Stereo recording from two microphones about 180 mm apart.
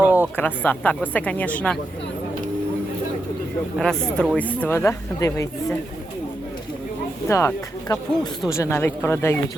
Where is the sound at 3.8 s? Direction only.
5° left (ahead or behind).